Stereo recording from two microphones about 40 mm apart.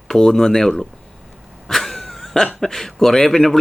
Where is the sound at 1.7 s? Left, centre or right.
Centre.